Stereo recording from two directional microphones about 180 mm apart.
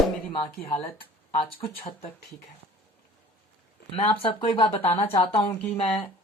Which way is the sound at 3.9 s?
30° left (ahead or behind).